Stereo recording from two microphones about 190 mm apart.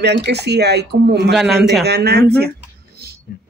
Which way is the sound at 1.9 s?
60° right (ahead or behind).